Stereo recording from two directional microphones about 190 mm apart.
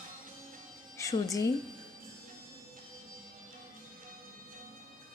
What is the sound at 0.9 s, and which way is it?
Speech, 15° left (ahead or behind).